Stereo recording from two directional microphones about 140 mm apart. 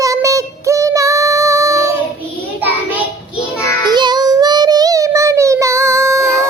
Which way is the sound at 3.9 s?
30° right (ahead or behind).